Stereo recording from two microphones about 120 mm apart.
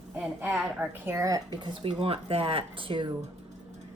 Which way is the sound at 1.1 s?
30° right (ahead or behind).